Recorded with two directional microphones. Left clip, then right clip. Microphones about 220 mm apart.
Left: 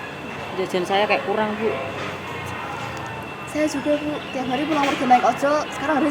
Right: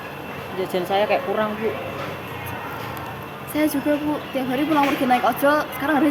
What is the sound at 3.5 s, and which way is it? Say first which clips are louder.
Speech: right 1 dB; 50° right (ahead or behind).